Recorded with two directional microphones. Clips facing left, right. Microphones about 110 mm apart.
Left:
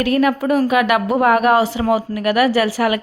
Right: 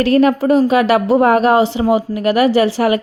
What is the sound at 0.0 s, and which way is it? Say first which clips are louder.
A woman's voice: right 4 dB; 30° right (ahead or behind).